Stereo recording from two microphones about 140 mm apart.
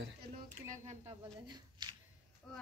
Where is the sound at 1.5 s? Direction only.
30° right (ahead or behind).